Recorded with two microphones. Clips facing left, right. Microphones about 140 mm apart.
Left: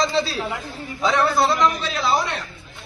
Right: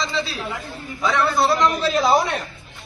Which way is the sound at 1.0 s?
20° left (ahead or behind).